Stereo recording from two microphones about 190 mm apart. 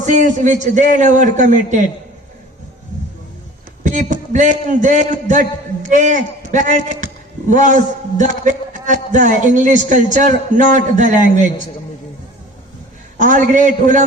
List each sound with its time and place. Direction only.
0.0 s a man's voice: 40° right (ahead or behind)
3.8 s a sound: 40° right (ahead or behind)
4.7 s a man's voice: 40° right (ahead or behind)
13.1 s a man's voice: 40° right (ahead or behind)